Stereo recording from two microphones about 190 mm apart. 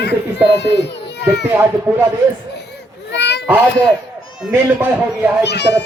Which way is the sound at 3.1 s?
65° left (ahead or behind).